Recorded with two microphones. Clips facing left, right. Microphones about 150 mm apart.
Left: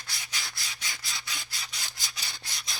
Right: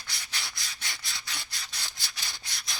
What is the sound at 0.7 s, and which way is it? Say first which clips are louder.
Rub: left 1 dB; 20° left (ahead or behind).